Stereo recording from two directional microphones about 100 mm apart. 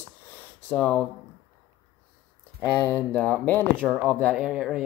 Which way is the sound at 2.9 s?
10° left (ahead or behind).